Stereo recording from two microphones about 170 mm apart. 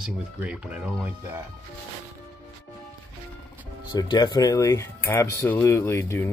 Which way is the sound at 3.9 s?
25° left (ahead or behind).